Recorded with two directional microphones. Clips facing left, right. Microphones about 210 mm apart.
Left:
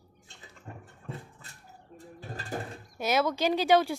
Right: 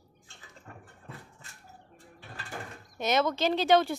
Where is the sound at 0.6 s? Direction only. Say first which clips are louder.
Left 5 dB; 25° left (ahead or behind).